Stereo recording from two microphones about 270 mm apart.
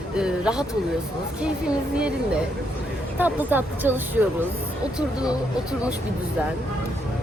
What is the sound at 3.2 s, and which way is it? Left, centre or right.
Speech, centre.